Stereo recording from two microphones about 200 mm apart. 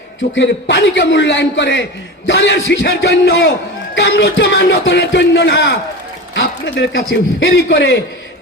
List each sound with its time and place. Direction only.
0.3 s speech: 65° left (ahead or behind)